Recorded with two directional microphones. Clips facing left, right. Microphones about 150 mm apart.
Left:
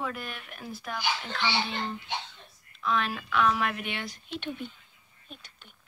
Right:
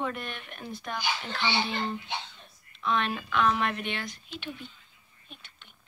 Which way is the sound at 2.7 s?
Centre (ahead or behind).